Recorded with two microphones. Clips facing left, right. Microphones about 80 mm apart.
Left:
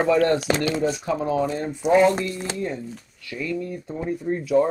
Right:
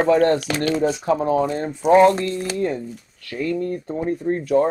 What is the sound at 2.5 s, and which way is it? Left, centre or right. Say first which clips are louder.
Speech: right 5 dB; right.